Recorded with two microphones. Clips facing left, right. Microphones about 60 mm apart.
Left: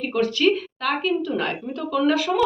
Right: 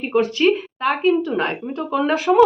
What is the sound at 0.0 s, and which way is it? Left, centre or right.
A woman's voice, right.